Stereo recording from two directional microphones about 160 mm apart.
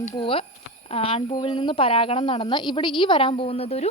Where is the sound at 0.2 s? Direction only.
35° left (ahead or behind).